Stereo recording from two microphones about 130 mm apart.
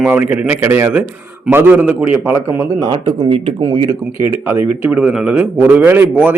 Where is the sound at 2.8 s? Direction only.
35° right (ahead or behind).